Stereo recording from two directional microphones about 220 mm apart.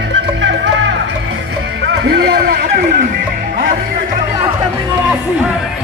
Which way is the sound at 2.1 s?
45° right (ahead or behind).